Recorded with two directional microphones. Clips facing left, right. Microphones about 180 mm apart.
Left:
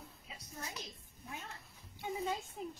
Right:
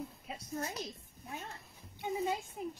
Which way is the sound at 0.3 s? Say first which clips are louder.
Right 7 dB; 50° right (ahead or behind).